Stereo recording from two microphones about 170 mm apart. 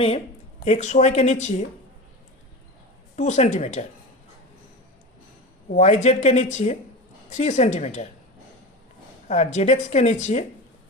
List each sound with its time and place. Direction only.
0.6 s a woman's voice: 40° left (ahead or behind)
3.2 s a woman's voice: 45° left (ahead or behind)
5.7 s a woman's voice: 40° left (ahead or behind)
9.2 s a woman's voice: 40° left (ahead or behind)